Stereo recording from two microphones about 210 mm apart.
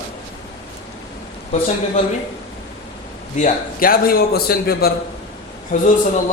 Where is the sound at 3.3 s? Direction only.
40° left (ahead or behind).